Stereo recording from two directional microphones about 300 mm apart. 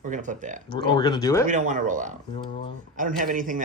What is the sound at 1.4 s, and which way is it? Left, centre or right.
Speech, right.